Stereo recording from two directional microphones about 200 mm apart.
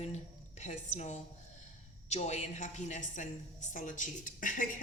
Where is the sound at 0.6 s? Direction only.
35° left (ahead or behind).